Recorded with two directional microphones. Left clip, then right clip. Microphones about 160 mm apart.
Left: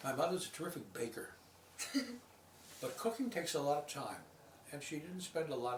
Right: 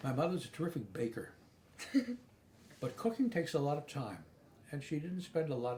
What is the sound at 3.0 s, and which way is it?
Speech, 15° left (ahead or behind).